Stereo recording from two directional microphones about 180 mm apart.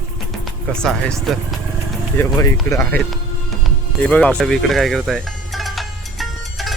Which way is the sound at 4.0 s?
5° left (ahead or behind).